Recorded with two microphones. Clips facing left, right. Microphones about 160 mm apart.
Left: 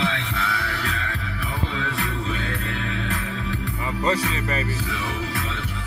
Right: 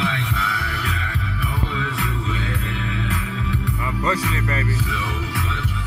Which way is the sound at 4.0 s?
25° left (ahead or behind).